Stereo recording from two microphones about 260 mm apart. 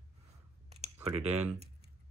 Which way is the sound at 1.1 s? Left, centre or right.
Right.